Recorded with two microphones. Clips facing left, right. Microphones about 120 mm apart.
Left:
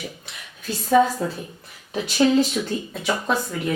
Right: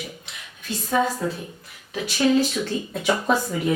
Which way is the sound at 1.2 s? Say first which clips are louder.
Even; 35° left (ahead or behind).